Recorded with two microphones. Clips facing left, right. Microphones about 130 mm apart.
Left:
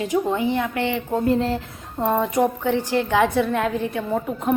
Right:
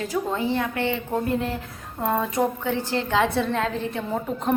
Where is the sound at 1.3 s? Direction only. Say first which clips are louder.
Left 7 dB; 30° left (ahead or behind).